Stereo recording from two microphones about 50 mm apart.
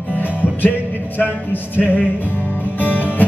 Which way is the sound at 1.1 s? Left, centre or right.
Left.